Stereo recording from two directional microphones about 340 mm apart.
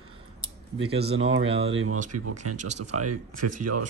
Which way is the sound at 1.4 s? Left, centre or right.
Centre.